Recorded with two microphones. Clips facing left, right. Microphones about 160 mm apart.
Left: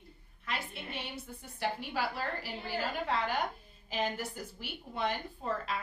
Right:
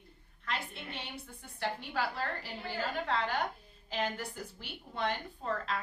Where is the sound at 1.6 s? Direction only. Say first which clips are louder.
Left 1 dB; 10° left (ahead or behind).